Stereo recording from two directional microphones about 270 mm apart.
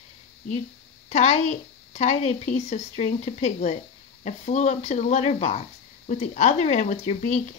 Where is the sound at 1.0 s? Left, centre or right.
Left.